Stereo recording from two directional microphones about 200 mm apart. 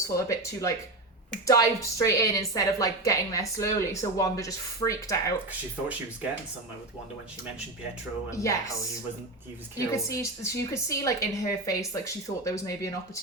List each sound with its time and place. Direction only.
0.1 s a woman's voice: 15° left (ahead or behind)
8.3 s a woman's voice: 15° left (ahead or behind)
9.7 s a woman's voice: 15° left (ahead or behind)